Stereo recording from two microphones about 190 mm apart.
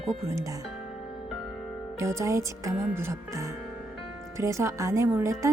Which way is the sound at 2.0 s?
15° right (ahead or behind).